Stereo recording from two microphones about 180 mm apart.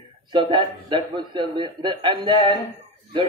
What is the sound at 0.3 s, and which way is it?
A man's voice, 25° right (ahead or behind).